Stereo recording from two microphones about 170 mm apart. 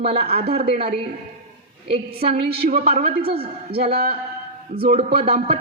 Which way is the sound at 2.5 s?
70° right (ahead or behind).